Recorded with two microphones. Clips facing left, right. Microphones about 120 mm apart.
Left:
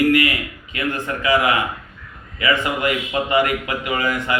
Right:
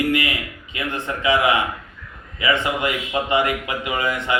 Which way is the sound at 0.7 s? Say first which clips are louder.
Left 2 dB; 20° right (ahead or behind).